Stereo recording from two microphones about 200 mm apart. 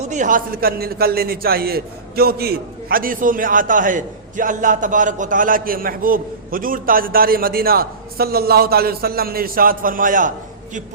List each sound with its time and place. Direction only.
0.0 s a man's voice: 35° right (ahead or behind)